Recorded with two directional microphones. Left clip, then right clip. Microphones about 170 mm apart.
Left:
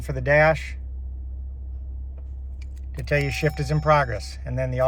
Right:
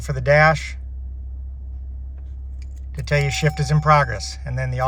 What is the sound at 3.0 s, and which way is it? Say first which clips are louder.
Speech: right 2 dB; 5° right (ahead or behind).